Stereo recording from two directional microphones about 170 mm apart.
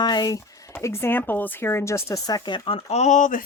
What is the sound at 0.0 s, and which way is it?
Speech, 25° left (ahead or behind).